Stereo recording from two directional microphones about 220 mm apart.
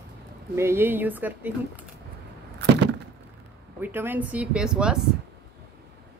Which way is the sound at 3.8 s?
10° right (ahead or behind).